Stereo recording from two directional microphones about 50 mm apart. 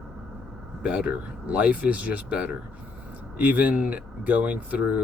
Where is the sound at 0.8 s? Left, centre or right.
Right.